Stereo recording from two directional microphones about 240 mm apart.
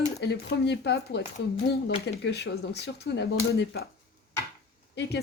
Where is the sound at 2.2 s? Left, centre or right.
Left.